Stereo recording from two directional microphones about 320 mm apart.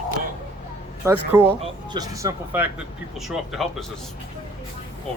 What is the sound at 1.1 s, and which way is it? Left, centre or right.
Speech, centre.